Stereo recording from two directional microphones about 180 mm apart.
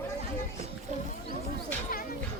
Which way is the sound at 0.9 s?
40° right (ahead or behind).